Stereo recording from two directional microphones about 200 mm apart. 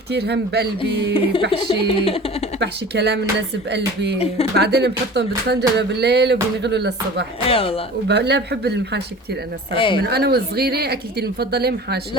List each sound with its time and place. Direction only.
0.1 s speech: 55° right (ahead or behind)
0.8 s speech: 25° left (ahead or behind)
2.6 s speech: 55° right (ahead or behind)
7.4 s speech: 30° left (ahead or behind)
8.0 s speech: 55° right (ahead or behind)
9.7 s speech: 25° left (ahead or behind)
10.1 s a woman's voice: 55° right (ahead or behind)